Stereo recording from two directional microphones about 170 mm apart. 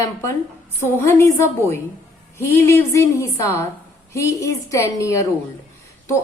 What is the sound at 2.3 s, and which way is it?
A woman's voice, 15° left (ahead or behind).